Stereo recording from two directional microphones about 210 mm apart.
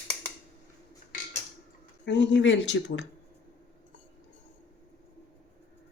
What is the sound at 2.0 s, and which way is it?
Speech, 55° left (ahead or behind).